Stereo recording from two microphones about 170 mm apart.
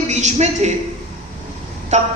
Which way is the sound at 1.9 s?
45° right (ahead or behind).